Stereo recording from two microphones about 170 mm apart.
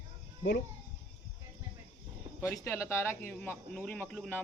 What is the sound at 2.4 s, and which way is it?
Speech, 15° left (ahead or behind).